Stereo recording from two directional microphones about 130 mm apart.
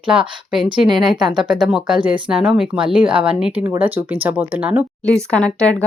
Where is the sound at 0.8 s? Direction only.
35° right (ahead or behind).